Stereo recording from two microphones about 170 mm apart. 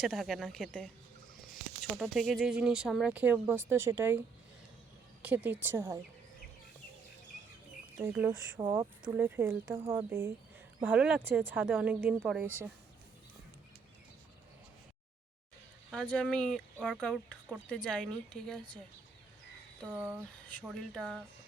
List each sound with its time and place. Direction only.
0.0 s speech: centre (ahead or behind)
5.2 s speech: 10° right (ahead or behind)
7.9 s speech: 15° right (ahead or behind)
15.9 s speech: 5° left (ahead or behind)
19.8 s speech: 10° right (ahead or behind)
20.7 s speech: 5° left (ahead or behind)